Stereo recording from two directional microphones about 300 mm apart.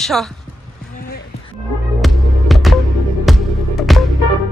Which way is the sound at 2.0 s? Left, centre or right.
Centre.